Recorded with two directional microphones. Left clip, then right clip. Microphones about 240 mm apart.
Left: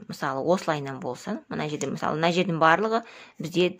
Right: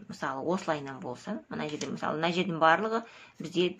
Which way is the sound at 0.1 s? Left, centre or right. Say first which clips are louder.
Left 7 dB; left.